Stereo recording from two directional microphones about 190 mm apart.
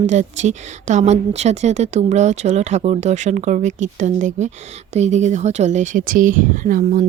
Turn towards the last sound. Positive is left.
turn(degrees=-45)  # may be behind; listen again after turning